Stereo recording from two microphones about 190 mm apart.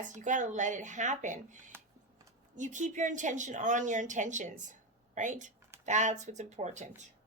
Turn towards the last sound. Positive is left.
turn(degrees=-40)  # may be behind; listen again after turning